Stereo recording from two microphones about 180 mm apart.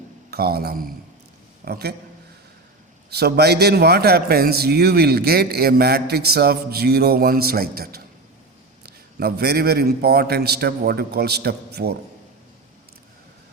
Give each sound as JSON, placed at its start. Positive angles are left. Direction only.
{"t": 0.3, "sound": "a man's voice", "side_deg": -60}
{"t": 3.1, "sound": "a man's voice", "side_deg": -65}